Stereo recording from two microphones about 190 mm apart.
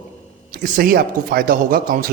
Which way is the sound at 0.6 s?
50° right (ahead or behind).